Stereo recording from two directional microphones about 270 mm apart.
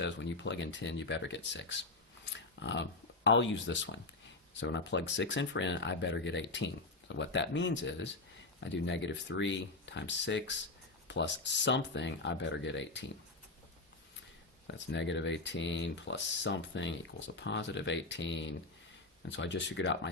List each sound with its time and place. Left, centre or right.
0.0 s speech: left
14.7 s speech: left